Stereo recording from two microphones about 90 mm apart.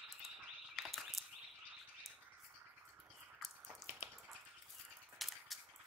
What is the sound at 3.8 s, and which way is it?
Bathtub, 30° right (ahead or behind).